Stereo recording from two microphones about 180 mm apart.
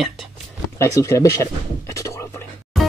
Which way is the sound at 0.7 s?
15° left (ahead or behind).